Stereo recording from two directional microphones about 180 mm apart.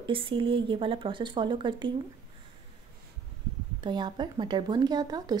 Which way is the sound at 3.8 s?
25° right (ahead or behind).